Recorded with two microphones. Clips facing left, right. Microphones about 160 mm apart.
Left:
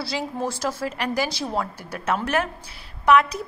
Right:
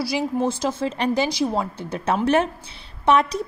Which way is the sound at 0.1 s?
20° right (ahead or behind).